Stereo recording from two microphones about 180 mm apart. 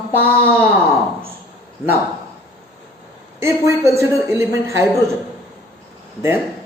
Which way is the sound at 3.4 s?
15° right (ahead or behind).